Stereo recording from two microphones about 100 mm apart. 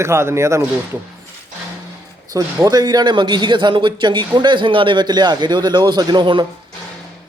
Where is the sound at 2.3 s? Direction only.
40° right (ahead or behind).